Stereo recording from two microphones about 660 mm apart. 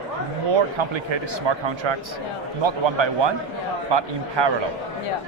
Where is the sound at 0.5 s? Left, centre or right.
Right.